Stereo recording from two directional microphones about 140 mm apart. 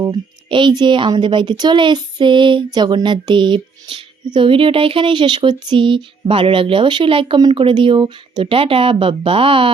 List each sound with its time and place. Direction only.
0.0 s speech: 35° right (ahead or behind)